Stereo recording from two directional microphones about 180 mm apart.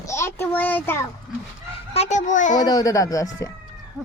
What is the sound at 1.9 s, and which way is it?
Speech, 40° left (ahead or behind).